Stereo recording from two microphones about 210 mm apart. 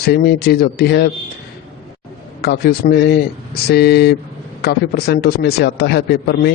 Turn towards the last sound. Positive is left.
turn(degrees=50)  # may be behind; listen again after turning